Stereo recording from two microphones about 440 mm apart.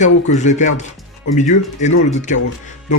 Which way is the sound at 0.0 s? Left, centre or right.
Centre.